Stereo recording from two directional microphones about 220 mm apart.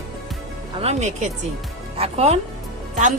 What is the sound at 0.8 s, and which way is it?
A woman's voice, 30° right (ahead or behind).